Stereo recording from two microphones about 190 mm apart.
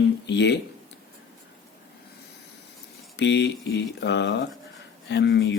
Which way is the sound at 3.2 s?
65° left (ahead or behind).